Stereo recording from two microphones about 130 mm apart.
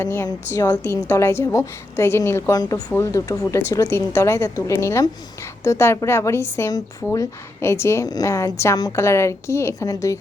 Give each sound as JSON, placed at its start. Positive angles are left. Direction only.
{"t": 0.0, "sound": "a woman's voice", "side_deg": 20}